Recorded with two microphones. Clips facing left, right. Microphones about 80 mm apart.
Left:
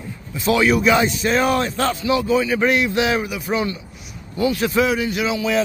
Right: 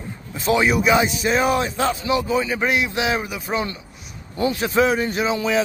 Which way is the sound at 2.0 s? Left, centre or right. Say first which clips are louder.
Left 2 dB; right.